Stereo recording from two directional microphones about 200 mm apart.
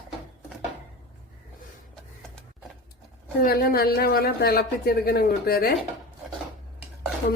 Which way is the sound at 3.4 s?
50° left (ahead or behind).